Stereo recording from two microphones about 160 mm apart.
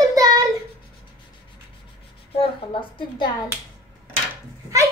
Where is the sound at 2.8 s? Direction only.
30° left (ahead or behind).